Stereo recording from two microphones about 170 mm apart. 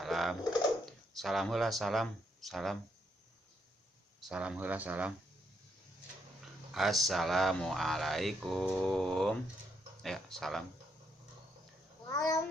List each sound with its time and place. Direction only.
0.0 s a sound: centre (ahead or behind)
0.9 s speech: centre (ahead or behind)
4.2 s speech: 5° right (ahead or behind)
6.4 s speech: centre (ahead or behind)
12.1 s a child's voice: 20° left (ahead or behind)